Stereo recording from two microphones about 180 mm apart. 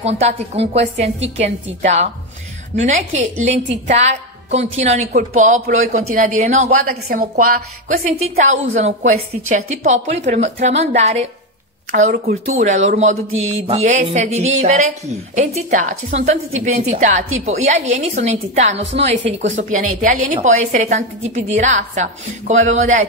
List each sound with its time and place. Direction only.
0.0 s a woman's voice: 35° right (ahead or behind)
3.3 s a woman's voice: 40° right (ahead or behind)
6.9 s a woman's voice: 50° right (ahead or behind)
18.8 s a woman's voice: 90° right
19.4 s a woman's voice: 40° right (ahead or behind)